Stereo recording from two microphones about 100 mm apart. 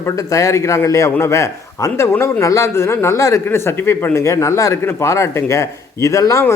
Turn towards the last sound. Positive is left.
turn(degrees=35)  # may be behind; listen again after turning